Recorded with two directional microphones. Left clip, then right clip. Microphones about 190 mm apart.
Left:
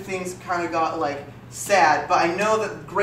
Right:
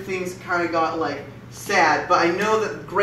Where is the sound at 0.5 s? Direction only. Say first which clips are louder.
Right 2 dB; 15° left (ahead or behind).